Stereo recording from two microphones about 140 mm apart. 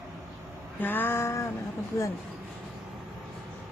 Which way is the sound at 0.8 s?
15° left (ahead or behind).